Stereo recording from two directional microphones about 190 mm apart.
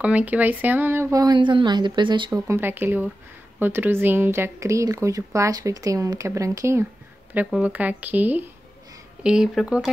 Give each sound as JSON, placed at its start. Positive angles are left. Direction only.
{"t": 0.0, "sound": "speech", "side_deg": -10}
{"t": 2.4, "sound": "speech", "side_deg": -10}